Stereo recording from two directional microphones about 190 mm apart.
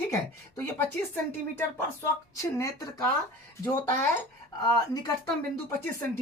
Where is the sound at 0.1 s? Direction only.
15° left (ahead or behind).